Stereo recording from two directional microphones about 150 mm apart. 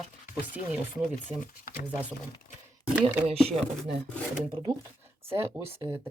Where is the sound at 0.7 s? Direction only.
10° right (ahead or behind).